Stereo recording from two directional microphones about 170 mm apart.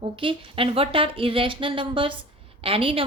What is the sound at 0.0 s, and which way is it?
A woman's voice, 30° right (ahead or behind).